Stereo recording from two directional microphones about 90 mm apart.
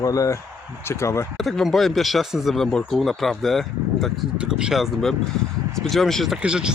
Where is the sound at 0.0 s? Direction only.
40° left (ahead or behind).